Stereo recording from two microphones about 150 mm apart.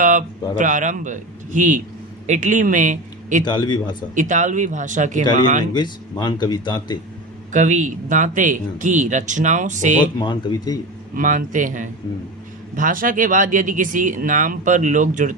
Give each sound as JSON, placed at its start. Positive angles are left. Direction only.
{"t": 0.0, "sound": "a sound", "side_deg": -60}
{"t": 0.5, "sound": "speech", "side_deg": -60}
{"t": 3.4, "sound": "speech", "side_deg": 30}
{"t": 4.1, "sound": "speech", "side_deg": -55}
{"t": 5.7, "sound": "speech", "side_deg": 30}
{"t": 7.5, "sound": "speech", "side_deg": -55}
{"t": 10.2, "sound": "speech", "side_deg": 25}
{"t": 11.1, "sound": "speech", "side_deg": -60}